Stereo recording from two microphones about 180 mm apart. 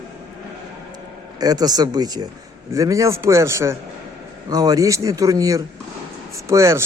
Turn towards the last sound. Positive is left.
turn(degrees=-15)  # may be behind; listen again after turning